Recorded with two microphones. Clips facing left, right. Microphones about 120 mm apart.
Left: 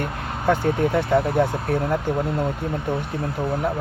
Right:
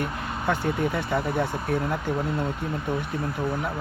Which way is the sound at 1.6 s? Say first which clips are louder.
Left 4 dB; 40° left (ahead or behind).